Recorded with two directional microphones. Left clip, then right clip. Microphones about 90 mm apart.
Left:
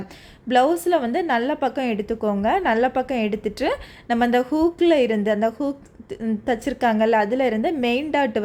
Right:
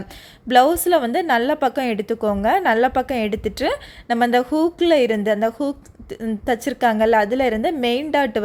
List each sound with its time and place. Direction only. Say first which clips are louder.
0.4 s a woman's voice: right 3 dB; 35° right (ahead or behind)